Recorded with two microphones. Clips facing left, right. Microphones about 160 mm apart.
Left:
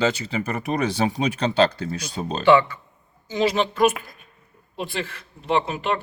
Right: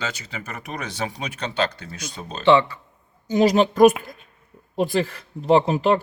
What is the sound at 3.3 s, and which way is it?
A woman's voice, 45° right (ahead or behind).